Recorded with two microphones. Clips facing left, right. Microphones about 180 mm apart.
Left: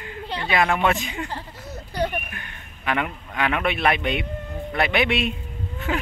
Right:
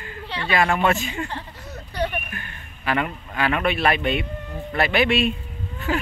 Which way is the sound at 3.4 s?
15° left (ahead or behind).